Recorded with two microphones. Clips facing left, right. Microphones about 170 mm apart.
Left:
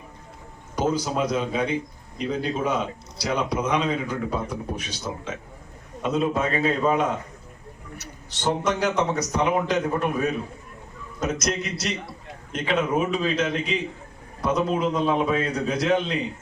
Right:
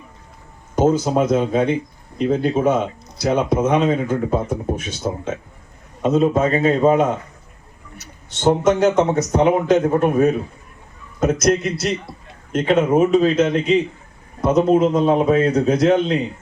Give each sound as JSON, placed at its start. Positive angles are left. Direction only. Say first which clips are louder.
{"t": 1.3, "sound": "speech", "louder": "right 7 dB", "side_deg": -50}
{"t": 8.4, "sound": "speech", "louder": "right 9 dB", "side_deg": -45}